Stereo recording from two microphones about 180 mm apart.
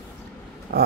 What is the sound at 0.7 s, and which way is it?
Speech, 60° right (ahead or behind).